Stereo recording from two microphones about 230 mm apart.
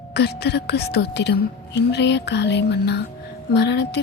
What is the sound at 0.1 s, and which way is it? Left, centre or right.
A woman's voice, left.